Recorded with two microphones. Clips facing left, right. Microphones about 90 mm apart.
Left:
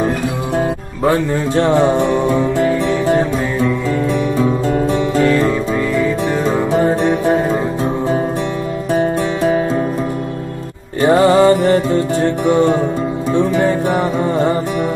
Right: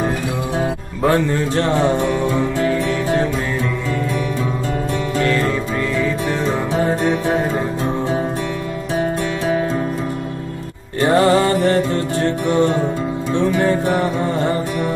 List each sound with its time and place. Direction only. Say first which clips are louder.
1.5 s music: left 7 dB; 20° left (ahead or behind)
11.0 s music: left 3 dB; 15° left (ahead or behind)